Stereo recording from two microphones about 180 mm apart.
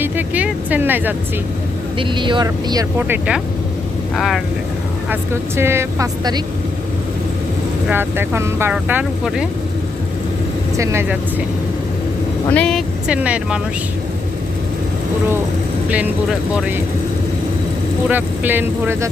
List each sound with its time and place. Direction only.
0.0 s vehicle: 10° right (ahead or behind)
2.0 s speech: 25° right (ahead or behind)
3.0 s speech: 10° right (ahead or behind)
5.0 s speech: 15° right (ahead or behind)
7.9 s speech: 10° right (ahead or behind)
10.8 s speech: 15° right (ahead or behind)
12.5 s speech: 5° left (ahead or behind)
15.9 s speech: 5° right (ahead or behind)
18.1 s speech: 10° right (ahead or behind)